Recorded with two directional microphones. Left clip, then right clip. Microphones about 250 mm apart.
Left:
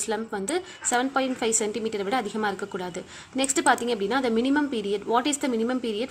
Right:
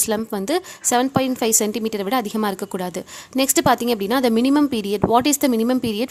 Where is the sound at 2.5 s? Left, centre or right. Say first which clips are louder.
Right 5 dB; right.